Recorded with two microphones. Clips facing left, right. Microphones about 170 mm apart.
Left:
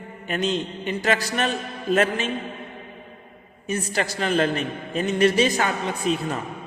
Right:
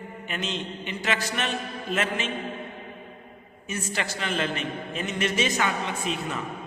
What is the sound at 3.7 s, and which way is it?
A man's voice, 40° left (ahead or behind).